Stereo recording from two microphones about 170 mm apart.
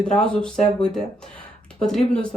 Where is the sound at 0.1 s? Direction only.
5° left (ahead or behind).